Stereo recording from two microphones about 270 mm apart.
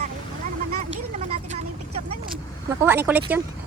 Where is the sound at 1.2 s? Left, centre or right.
Right.